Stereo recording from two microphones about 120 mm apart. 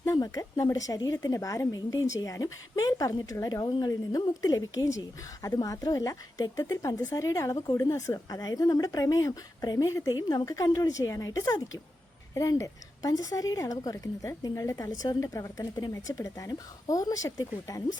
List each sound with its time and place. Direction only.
0.0 s speech: 30° left (ahead or behind)